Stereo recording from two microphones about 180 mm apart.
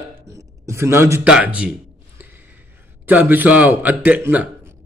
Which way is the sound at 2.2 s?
10° right (ahead or behind).